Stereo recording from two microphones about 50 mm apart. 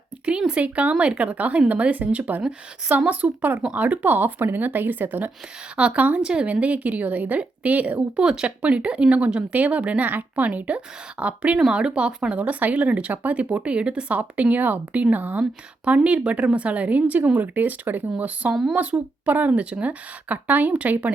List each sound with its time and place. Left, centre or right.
0.3 s a woman's voice: centre; by 5.3 s right
5.7 s speech: right
8.2 s speech: centre
12.4 s a woman's voice: right
18.7 s speech: right
18.9 s a woman's voice: right